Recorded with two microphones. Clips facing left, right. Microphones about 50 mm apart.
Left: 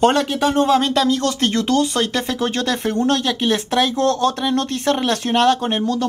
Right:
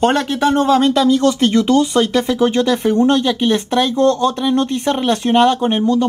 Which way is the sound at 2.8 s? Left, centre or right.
Centre.